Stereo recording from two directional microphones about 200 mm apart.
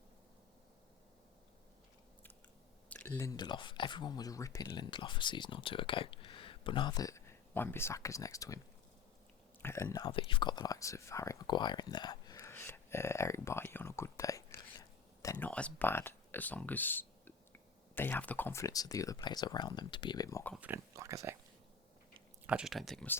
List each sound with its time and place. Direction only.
2.9 s speech: 5° left (ahead or behind)
20.6 s speech: 10° right (ahead or behind)
22.4 s speech: 5° right (ahead or behind)